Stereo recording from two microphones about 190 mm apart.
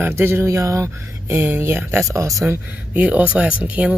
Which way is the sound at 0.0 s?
10° right (ahead or behind).